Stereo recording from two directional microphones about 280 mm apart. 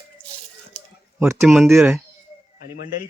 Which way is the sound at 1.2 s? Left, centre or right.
Centre.